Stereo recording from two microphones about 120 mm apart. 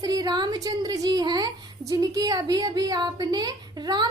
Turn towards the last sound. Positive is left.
turn(degrees=-35)  # may be behind; listen again after turning